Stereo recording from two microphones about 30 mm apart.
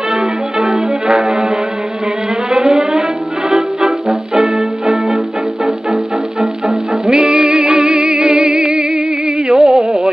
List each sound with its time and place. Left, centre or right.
0.1 s brass instrument: centre
2.5 s music: right
6.4 s music: centre
9.5 s music: centre